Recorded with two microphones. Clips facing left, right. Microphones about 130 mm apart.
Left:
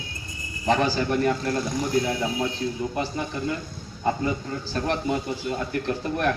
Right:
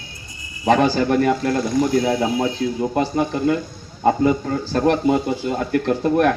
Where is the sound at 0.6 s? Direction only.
55° right (ahead or behind).